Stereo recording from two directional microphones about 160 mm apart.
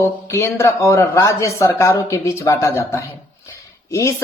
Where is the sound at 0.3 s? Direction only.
15° left (ahead or behind).